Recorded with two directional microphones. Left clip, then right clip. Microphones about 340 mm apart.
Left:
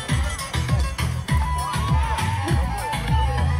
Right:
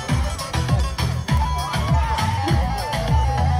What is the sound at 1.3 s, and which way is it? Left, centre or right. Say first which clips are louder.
Music: right 1 dB; centre.